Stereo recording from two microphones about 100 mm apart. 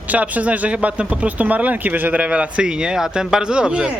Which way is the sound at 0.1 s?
15° right (ahead or behind).